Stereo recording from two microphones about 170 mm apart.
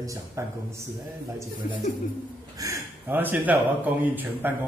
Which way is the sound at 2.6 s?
15° right (ahead or behind).